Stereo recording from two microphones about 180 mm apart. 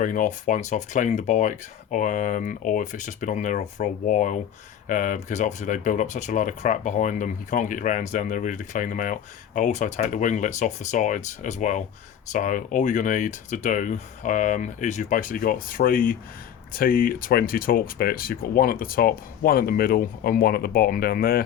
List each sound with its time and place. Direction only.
0.0 s speech: 50° left (ahead or behind)